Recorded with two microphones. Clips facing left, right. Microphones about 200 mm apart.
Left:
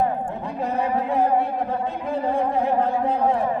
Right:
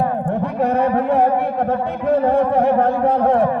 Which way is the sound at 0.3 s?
65° right (ahead or behind).